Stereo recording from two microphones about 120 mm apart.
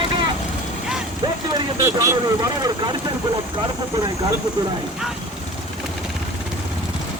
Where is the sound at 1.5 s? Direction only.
30° right (ahead or behind).